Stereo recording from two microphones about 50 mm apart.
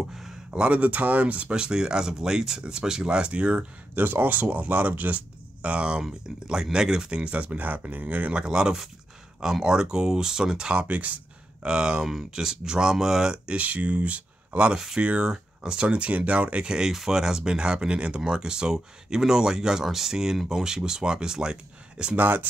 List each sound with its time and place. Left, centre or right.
0.1 s a sound: centre
0.7 s speech: right
3.9 s speech: right
11.6 s speech: centre
13.6 s speech: right
16.6 s speech: centre
22.1 s speech: right